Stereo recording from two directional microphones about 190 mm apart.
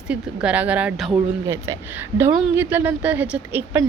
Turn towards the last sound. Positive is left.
turn(degrees=-10)  # may be behind; listen again after turning